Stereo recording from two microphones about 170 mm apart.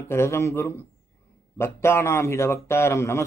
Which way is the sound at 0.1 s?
15° left (ahead or behind).